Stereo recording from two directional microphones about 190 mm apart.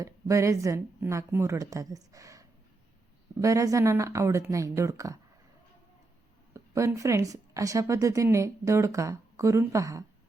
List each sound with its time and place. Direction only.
0.0 s a woman's voice: 15° right (ahead or behind)
6.5 s speech: 15° right (ahead or behind)